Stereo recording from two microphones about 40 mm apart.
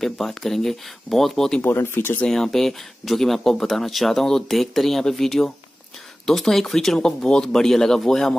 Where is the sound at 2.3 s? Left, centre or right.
Centre.